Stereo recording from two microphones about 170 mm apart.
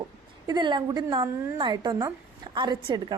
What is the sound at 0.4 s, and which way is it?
A woman's voice, 25° right (ahead or behind).